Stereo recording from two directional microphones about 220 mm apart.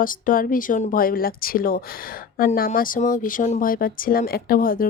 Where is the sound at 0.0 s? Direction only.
40° left (ahead or behind).